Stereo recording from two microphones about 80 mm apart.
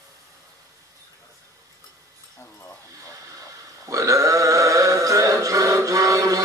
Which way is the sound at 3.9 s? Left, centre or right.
Right.